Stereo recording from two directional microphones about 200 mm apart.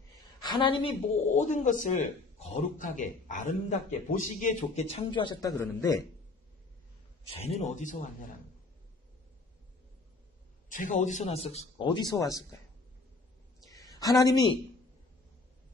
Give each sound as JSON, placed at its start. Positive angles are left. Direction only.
{"t": 0.4, "sound": "a woman's voice", "side_deg": 25}
{"t": 7.3, "sound": "a woman's voice", "side_deg": 30}
{"t": 10.7, "sound": "a woman's voice", "side_deg": 40}
{"t": 13.7, "sound": "a sound", "side_deg": 20}